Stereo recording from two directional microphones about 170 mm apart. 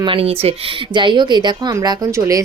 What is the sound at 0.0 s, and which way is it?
A woman's voice, 30° right (ahead or behind).